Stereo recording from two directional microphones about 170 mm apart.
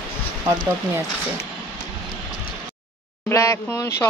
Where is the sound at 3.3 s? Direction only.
15° left (ahead or behind).